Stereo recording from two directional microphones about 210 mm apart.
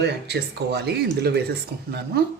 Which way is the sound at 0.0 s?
50° right (ahead or behind).